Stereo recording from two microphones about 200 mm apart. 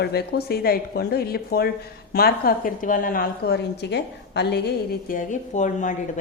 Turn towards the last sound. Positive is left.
turn(degrees=40)  # may be behind; listen again after turning